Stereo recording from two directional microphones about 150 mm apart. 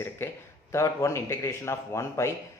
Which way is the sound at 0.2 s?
15° left (ahead or behind).